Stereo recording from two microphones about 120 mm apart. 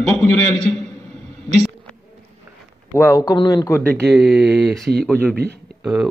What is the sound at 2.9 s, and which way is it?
Speech, 25° left (ahead or behind).